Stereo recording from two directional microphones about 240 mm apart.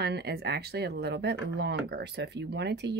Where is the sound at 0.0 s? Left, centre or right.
Right.